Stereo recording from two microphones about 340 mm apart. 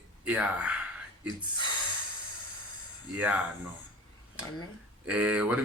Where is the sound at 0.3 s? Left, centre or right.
Centre.